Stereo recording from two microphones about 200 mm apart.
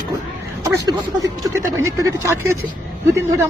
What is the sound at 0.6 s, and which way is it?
A man's voice, 15° right (ahead or behind).